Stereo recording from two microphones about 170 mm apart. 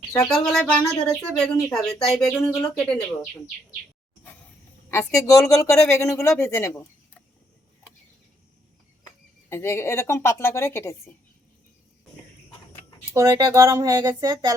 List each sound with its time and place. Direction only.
0.2 s speech: 5° left (ahead or behind)
4.9 s a woman's voice: 15° left (ahead or behind)
9.5 s a woman's voice: 15° left (ahead or behind)
13.1 s speech: 15° right (ahead or behind)